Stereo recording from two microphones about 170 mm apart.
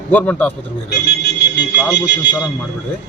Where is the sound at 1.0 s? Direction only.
80° left.